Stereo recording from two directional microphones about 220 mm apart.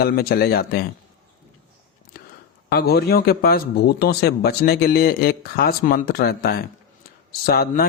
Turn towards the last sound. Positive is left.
turn(degrees=45)  # may be behind; listen again after turning